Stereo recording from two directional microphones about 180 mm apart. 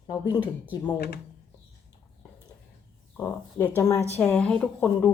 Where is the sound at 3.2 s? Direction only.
10° left (ahead or behind).